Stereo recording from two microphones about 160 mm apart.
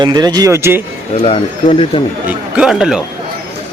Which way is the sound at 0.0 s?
25° right (ahead or behind).